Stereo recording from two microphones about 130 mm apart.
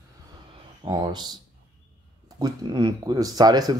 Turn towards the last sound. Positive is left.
turn(degrees=-30)  # may be behind; listen again after turning